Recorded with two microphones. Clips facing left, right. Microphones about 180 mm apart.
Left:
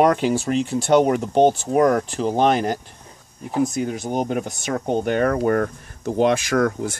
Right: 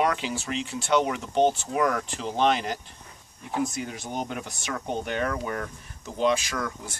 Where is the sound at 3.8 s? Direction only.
45° left (ahead or behind).